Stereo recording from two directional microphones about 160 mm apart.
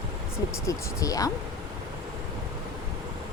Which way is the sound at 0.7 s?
20° left (ahead or behind).